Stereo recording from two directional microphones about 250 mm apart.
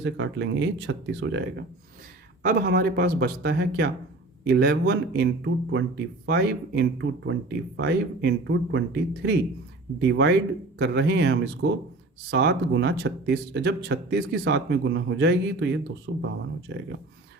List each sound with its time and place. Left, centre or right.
0.0 s speech: right